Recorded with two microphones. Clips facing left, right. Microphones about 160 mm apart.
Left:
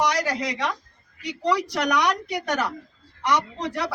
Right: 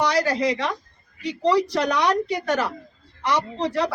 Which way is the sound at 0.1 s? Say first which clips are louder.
Right 5 dB; 30° right (ahead or behind).